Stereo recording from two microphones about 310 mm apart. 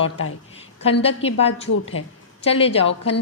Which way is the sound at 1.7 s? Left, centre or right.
Left.